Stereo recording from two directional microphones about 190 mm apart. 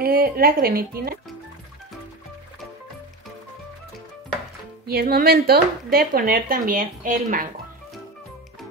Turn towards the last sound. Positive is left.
turn(degrees=-45)  # may be behind; listen again after turning